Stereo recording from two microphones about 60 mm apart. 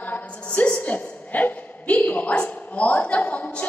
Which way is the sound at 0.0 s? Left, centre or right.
Left.